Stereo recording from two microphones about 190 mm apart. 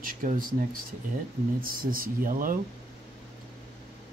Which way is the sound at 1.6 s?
50° right (ahead or behind).